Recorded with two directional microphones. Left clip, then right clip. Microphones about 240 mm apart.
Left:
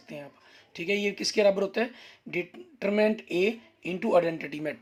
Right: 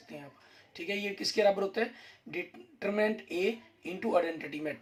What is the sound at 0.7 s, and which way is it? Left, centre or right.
Speech, left.